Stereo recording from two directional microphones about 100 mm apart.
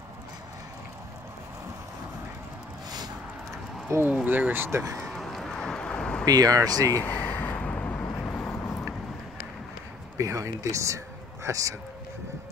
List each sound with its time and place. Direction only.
4.1 s speech: 15° right (ahead or behind); by 5.0 s 30° right (ahead or behind)
5.0 s a sound: centre (ahead or behind)
6.2 s speech: 40° right (ahead or behind)
6.9 s vehicle: 20° left (ahead or behind)
10.1 s speech: 30° right (ahead or behind)